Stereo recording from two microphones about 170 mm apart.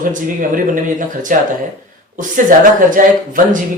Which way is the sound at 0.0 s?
50° right (ahead or behind).